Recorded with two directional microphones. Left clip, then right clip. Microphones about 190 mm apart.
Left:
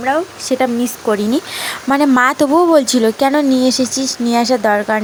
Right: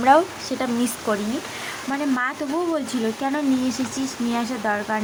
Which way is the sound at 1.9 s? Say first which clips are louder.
Left 13 dB; 35° left (ahead or behind).